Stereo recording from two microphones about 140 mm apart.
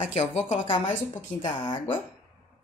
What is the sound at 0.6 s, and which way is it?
Speech, 35° left (ahead or behind).